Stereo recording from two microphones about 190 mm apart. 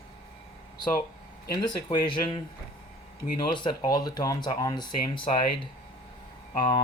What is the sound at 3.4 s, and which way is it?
Speech, 25° left (ahead or behind).